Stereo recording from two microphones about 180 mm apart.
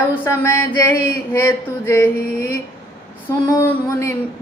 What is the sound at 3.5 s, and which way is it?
Speech, 15° left (ahead or behind).